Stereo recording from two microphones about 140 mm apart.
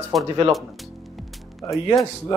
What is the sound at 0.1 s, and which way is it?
Speech, centre (ahead or behind).